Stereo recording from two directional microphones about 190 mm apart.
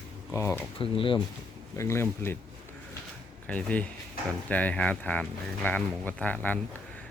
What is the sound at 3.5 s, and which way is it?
Speech, 5° left (ahead or behind).